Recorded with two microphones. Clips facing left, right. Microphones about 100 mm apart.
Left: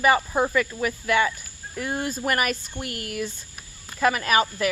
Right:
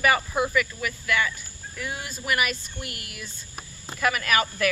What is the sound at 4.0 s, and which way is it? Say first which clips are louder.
Speech: left 3 dB; 30° left (ahead or behind).